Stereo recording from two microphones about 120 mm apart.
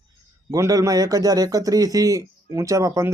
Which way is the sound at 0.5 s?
30° right (ahead or behind).